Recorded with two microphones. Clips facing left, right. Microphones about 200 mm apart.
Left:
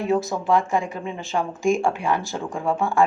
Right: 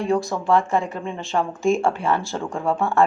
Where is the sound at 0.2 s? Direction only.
Centre (ahead or behind).